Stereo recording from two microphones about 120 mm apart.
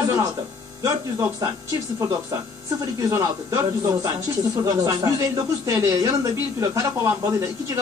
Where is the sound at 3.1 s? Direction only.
30° right (ahead or behind).